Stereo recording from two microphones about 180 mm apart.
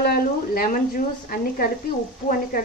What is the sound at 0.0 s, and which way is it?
A woman's voice, 55° left (ahead or behind).